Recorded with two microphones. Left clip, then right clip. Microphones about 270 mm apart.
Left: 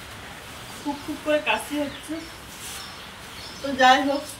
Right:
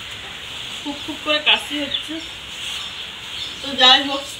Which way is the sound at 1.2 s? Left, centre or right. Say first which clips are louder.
Right 6 dB; centre.